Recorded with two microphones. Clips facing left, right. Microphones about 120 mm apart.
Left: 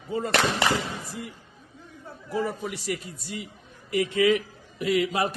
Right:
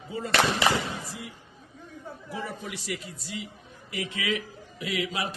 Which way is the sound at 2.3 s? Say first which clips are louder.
Left 8 dB; 50° left (ahead or behind).